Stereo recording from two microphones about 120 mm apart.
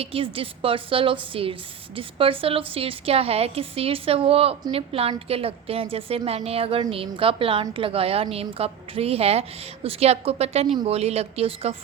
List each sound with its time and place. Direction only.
0.0 s a woman's voice: 50° right (ahead or behind)